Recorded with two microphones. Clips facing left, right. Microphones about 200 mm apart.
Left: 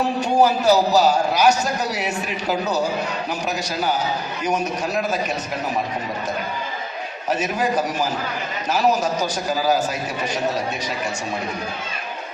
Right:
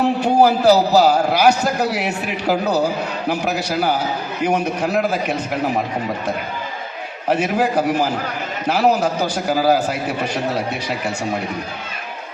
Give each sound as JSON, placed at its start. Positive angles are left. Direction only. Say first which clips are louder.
{"t": 0.0, "sound": "a man's voice", "louder": "right 3 dB", "side_deg": -60}
{"t": 7.3, "sound": "a man's voice", "louder": "right 4 dB", "side_deg": -60}